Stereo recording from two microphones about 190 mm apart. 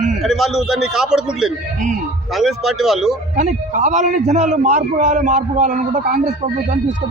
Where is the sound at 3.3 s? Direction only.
40° right (ahead or behind).